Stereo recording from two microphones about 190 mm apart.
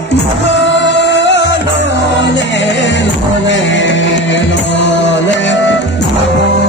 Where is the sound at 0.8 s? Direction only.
70° left (ahead or behind).